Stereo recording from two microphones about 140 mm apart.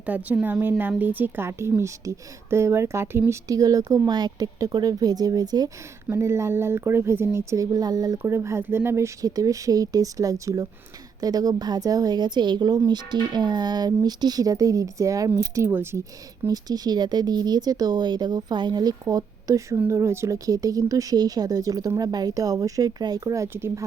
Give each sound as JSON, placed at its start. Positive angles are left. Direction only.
{"t": 0.0, "sound": "a woman's voice", "side_deg": -10}
{"t": 16.5, "sound": "a woman's voice", "side_deg": -30}